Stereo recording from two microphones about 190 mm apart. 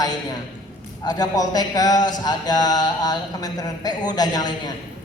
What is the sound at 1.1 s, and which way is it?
Speech, 20° left (ahead or behind).